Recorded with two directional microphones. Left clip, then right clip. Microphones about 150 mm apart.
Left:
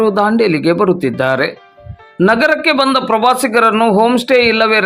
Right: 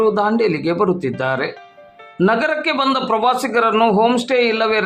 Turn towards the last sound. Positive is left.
turn(degrees=25)  # may be behind; listen again after turning